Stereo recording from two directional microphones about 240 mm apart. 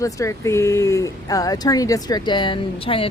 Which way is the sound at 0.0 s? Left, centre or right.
Centre.